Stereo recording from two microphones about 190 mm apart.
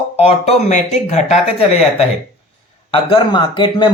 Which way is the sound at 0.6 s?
40° left (ahead or behind).